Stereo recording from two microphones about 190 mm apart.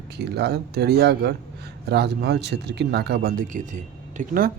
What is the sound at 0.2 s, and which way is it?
Speech, 60° right (ahead or behind).